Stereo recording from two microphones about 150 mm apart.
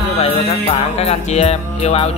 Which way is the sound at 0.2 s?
40° left (ahead or behind).